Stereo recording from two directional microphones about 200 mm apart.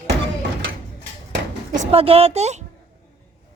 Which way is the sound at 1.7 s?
30° right (ahead or behind).